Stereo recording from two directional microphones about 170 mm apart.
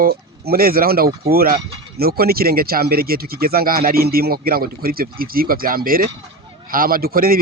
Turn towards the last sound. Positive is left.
turn(degrees=-60)  # may be behind; listen again after turning